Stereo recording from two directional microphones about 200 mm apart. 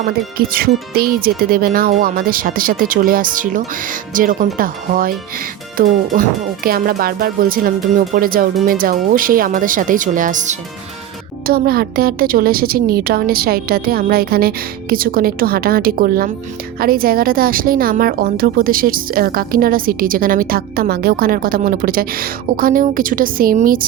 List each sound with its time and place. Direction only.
0.3 s a woman's voice: 50° right (ahead or behind)
11.4 s a woman's voice: 50° right (ahead or behind)